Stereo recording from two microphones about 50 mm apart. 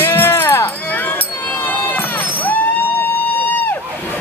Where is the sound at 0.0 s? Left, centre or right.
Left.